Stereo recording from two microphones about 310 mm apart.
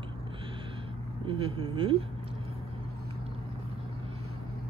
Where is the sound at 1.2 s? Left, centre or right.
Centre.